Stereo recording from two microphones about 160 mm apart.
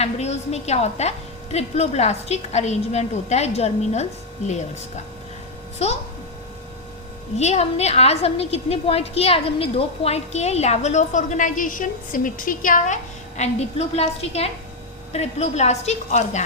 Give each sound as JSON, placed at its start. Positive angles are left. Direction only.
{"t": 0.0, "sound": "a woman's voice", "side_deg": 45}
{"t": 7.3, "sound": "a woman's voice", "side_deg": 45}